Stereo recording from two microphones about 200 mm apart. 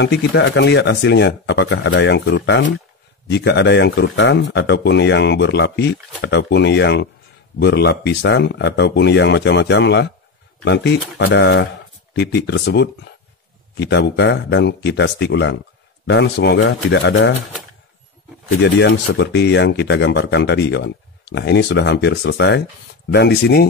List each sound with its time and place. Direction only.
0.0 s speech: 60° left (ahead or behind)
18.6 s speech: 55° left (ahead or behind)